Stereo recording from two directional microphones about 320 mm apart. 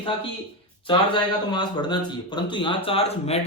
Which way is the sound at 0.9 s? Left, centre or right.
Centre.